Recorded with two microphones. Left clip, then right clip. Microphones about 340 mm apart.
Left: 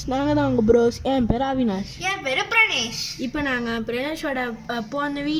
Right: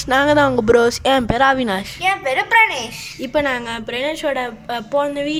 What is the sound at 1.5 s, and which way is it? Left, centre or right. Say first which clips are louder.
Speech: right 5 dB; right.